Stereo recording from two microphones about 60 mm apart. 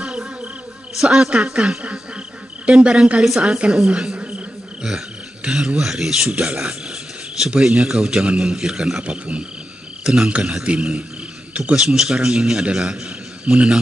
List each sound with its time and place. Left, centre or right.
0.0 s a sound: centre
0.9 s a man's voice: centre
9.0 s frog: centre
10.0 s a man's voice: centre